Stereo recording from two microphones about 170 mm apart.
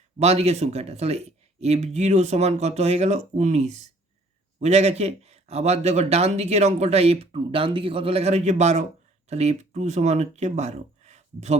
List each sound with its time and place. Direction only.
0.2 s speech: 40° right (ahead or behind)